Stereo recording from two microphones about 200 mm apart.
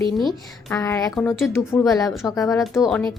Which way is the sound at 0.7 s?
15° left (ahead or behind).